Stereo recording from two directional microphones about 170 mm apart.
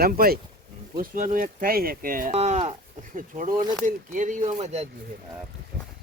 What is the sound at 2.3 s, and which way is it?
Speech, 40° right (ahead or behind).